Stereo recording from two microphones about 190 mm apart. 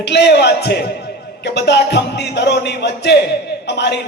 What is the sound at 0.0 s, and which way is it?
A man's voice, 65° left (ahead or behind).